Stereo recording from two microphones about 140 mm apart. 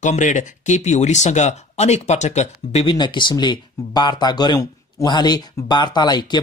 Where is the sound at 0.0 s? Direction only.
60° left (ahead or behind).